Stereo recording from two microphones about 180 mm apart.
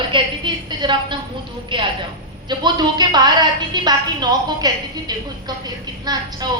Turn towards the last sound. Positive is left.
turn(degrees=-20)  # may be behind; listen again after turning